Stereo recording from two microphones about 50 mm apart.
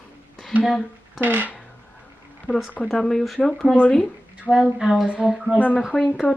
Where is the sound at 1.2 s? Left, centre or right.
Right.